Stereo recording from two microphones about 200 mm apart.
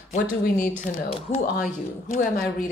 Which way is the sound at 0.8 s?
30° left (ahead or behind).